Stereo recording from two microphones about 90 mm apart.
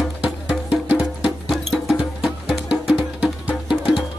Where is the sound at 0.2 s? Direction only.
10° right (ahead or behind).